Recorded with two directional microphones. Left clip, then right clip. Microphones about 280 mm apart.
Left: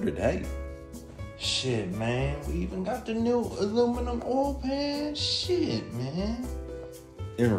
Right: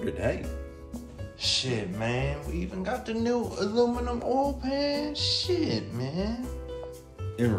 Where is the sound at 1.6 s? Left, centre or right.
Centre.